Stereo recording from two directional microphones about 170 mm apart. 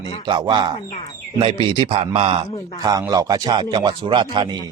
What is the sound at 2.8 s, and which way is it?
A man's voice, 20° right (ahead or behind).